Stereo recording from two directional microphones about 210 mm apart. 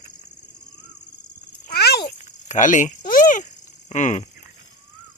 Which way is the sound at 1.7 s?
50° left (ahead or behind).